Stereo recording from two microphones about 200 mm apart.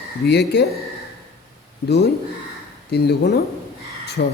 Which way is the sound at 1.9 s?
55° left (ahead or behind).